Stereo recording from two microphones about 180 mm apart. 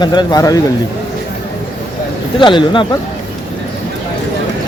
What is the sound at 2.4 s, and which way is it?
Speech, 25° left (ahead or behind).